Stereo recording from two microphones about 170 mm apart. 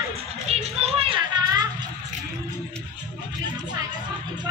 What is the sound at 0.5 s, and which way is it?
Music, 35° right (ahead or behind).